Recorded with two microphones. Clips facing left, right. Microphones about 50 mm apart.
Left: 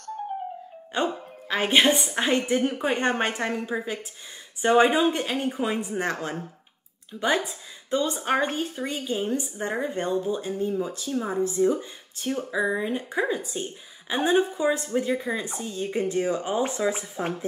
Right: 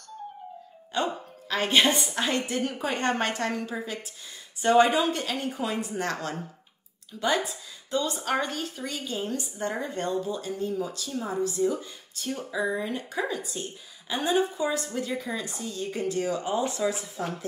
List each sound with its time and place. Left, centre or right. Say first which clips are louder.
0.9 s a woman's voice: left 2 dB; left